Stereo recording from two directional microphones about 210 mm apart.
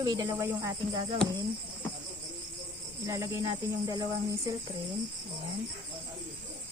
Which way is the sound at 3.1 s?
15° right (ahead or behind).